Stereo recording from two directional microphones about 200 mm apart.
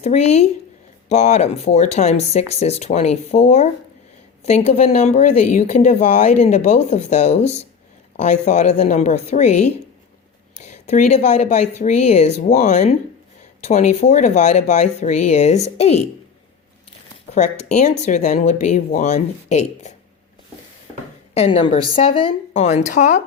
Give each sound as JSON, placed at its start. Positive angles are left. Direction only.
{"t": 0.0, "sound": "speech", "side_deg": 35}
{"t": 10.6, "sound": "speech", "side_deg": 35}
{"t": 17.3, "sound": "speech", "side_deg": 35}
{"t": 21.3, "sound": "speech", "side_deg": 30}